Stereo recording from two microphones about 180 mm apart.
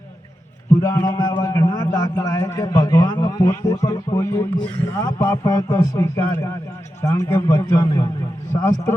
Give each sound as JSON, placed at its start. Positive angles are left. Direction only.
{"t": 0.8, "sound": "a man's voice", "side_deg": 15}